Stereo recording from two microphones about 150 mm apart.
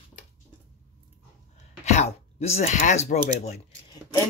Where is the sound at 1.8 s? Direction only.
50° left (ahead or behind).